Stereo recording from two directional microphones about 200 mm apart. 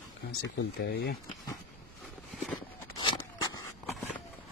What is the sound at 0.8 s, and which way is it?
Speech, 55° left (ahead or behind).